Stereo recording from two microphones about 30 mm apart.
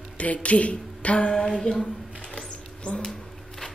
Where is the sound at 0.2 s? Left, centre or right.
Left.